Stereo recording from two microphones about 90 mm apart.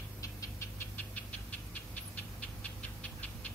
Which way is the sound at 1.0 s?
15° left (ahead or behind).